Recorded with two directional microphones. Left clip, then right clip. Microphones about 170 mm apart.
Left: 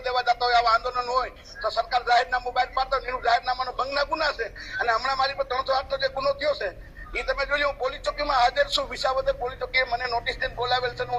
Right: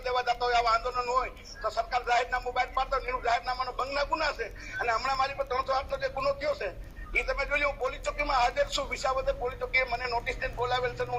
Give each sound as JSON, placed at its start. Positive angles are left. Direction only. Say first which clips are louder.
{"t": 0.0, "sound": "speech", "louder": "left 5 dB", "side_deg": 15}